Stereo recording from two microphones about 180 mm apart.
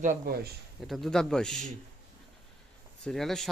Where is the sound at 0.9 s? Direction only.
Centre (ahead or behind).